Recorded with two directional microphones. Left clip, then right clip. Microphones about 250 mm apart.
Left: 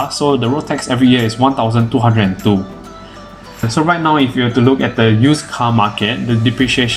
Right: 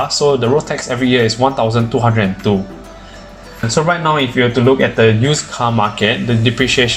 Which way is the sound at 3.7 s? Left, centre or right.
Centre.